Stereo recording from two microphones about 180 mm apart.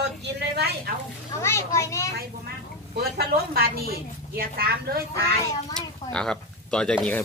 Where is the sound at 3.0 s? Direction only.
60° right (ahead or behind).